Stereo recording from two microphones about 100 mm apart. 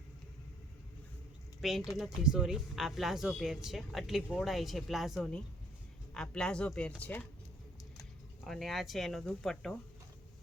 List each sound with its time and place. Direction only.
1.9 s speech: 5° right (ahead or behind)
6.1 s speech: 10° left (ahead or behind)
8.4 s speech: centre (ahead or behind)